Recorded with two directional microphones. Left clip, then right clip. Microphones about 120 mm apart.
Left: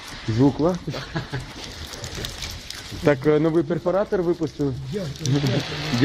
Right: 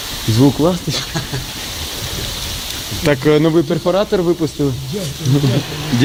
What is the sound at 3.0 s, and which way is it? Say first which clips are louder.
Speech: right 5 dB; 30° right (ahead or behind).